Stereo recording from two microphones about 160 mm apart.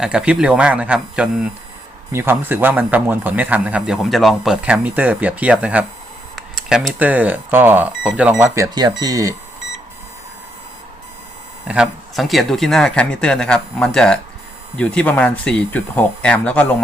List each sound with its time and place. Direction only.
0.0 s a man's voice: 5° right (ahead or behind)
8.5 s speech: 25° right (ahead or behind)
11.7 s speech: 5° right (ahead or behind)